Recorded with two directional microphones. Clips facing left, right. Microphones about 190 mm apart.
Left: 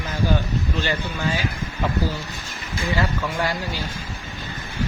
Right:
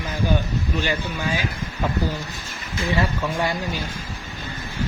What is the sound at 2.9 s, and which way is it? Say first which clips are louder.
Speech: right 1 dB; 25° right (ahead or behind).